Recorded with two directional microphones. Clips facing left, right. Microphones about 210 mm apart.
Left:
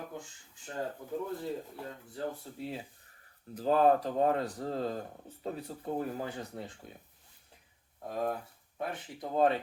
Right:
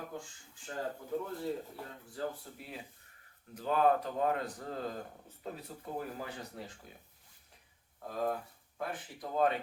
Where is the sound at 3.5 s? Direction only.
35° left (ahead or behind).